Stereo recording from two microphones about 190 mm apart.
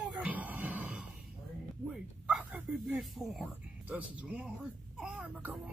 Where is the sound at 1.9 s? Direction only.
5° right (ahead or behind).